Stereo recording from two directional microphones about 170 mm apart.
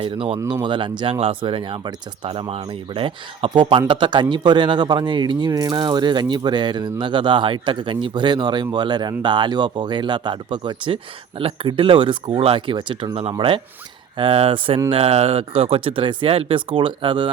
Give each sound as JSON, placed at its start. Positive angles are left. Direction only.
{"t": 0.0, "sound": "speech", "side_deg": -30}